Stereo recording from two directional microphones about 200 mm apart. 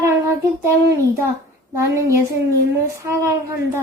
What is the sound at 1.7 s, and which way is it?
Speech, 15° right (ahead or behind).